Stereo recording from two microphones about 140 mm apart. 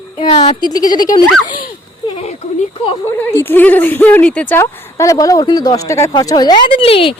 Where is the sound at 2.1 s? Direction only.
50° left (ahead or behind).